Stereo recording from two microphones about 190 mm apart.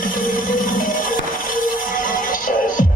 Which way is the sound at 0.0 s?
45° left (ahead or behind).